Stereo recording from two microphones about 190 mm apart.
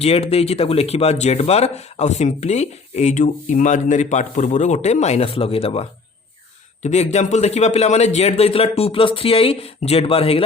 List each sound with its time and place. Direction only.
0.0 s speech: 30° left (ahead or behind)